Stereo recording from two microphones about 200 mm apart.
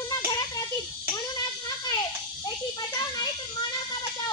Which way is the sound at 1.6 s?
20° left (ahead or behind).